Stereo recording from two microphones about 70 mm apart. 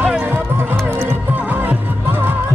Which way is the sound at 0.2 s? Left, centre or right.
Right.